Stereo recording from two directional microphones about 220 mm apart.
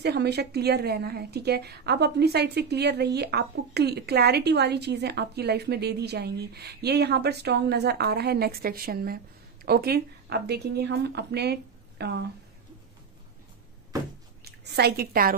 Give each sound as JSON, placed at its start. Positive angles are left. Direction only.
{"t": 0.0, "sound": "a woman's voice", "side_deg": -50}
{"t": 14.4, "sound": "a woman's voice", "side_deg": -50}